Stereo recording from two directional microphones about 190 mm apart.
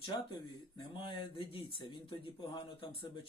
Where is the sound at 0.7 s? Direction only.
25° left (ahead or behind).